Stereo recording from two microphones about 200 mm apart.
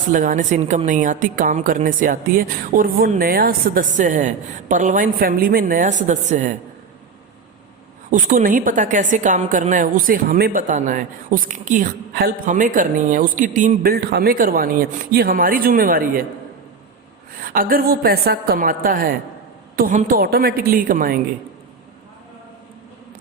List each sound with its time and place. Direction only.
0.1 s a woman's voice: 40° right (ahead or behind)
8.1 s a woman's voice: 40° right (ahead or behind)
17.4 s a woman's voice: 45° right (ahead or behind)